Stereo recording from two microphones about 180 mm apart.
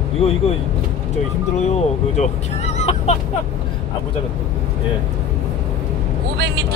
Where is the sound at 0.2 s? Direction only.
35° left (ahead or behind).